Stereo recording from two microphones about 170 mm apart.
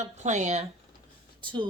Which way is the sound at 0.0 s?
45° right (ahead or behind).